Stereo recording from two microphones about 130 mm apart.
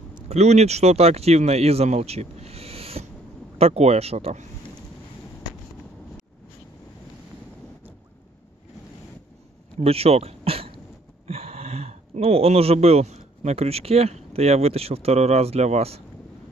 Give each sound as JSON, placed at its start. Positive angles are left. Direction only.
{"t": 0.3, "sound": "speech", "side_deg": -60}
{"t": 9.8, "sound": "speech", "side_deg": -50}